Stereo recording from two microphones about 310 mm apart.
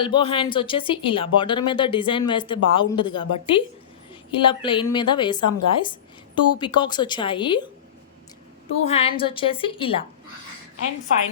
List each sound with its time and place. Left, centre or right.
0.0 s speech: centre
8.9 s speech: centre